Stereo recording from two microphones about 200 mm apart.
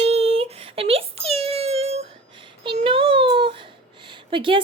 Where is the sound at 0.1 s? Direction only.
30° right (ahead or behind).